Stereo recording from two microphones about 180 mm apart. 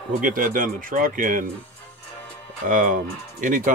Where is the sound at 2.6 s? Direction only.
50° right (ahead or behind).